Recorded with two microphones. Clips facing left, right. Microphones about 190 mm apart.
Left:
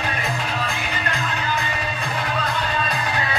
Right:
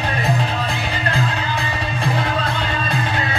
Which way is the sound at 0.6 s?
35° right (ahead or behind).